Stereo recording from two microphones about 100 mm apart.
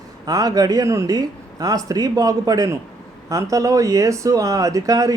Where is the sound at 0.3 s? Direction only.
35° right (ahead or behind).